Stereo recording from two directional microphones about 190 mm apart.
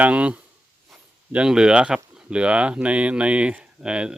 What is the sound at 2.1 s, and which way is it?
Speech, 5° right (ahead or behind).